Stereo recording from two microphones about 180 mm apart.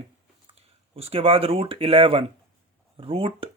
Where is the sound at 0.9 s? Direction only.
35° right (ahead or behind).